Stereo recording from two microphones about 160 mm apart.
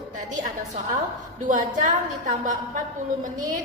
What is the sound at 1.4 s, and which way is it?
A woman's voice, 55° right (ahead or behind).